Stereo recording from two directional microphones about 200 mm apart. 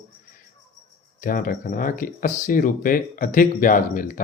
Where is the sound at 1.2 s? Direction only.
45° left (ahead or behind).